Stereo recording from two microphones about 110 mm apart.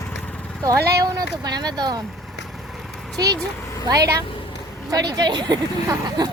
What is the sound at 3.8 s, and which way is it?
Speech, 30° right (ahead or behind).